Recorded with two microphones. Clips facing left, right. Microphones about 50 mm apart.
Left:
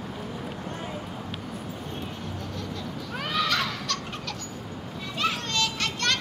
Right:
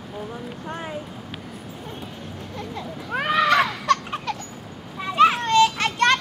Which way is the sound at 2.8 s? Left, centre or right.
Right.